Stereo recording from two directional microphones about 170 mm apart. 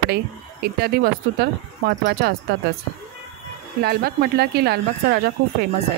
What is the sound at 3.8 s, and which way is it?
Speech, 65° right (ahead or behind).